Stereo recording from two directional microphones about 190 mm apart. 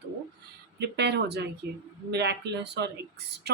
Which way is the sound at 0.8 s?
60° right (ahead or behind).